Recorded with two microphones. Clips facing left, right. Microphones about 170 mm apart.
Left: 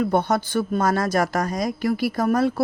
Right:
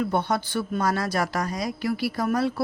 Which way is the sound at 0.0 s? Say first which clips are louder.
Left 4 dB; 45° left (ahead or behind).